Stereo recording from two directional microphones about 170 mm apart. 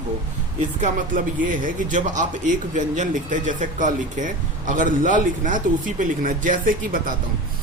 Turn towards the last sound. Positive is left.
turn(degrees=-55)  # may be behind; listen again after turning